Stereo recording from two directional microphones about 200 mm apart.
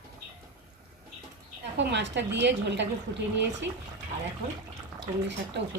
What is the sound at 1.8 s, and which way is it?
A woman's voice, 60° right (ahead or behind).